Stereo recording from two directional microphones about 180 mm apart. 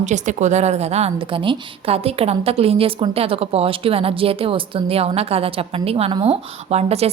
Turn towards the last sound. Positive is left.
turn(degrees=-35)  # may be behind; listen again after turning